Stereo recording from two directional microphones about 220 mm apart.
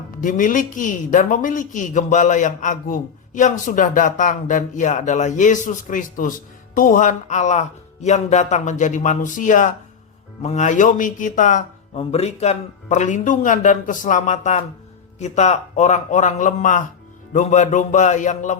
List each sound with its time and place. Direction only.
0.2 s a woman's voice: 35° left (ahead or behind)